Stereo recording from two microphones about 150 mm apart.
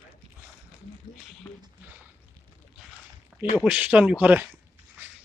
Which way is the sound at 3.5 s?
5° right (ahead or behind).